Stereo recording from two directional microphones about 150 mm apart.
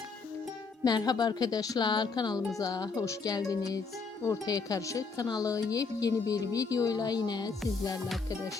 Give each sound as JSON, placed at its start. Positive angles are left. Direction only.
{"t": 0.9, "sound": "speech", "side_deg": 25}